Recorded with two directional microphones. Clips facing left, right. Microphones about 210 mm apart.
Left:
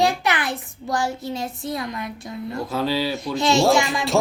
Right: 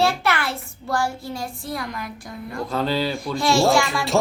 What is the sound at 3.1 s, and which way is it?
Speech, 20° left (ahead or behind).